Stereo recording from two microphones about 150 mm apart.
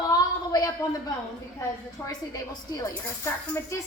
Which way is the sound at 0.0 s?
25° left (ahead or behind).